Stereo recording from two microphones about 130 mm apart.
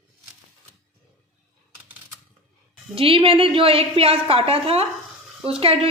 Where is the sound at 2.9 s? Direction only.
45° right (ahead or behind).